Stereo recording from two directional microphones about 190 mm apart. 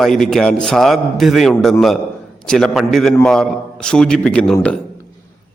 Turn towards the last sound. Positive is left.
turn(degrees=5)  # may be behind; listen again after turning